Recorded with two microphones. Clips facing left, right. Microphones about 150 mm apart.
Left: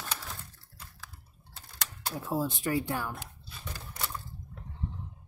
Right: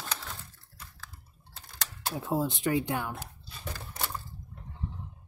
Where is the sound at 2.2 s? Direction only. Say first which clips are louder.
Right 2 dB; 15° right (ahead or behind).